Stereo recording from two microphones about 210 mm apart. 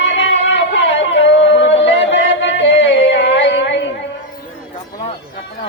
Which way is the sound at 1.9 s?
60° left (ahead or behind).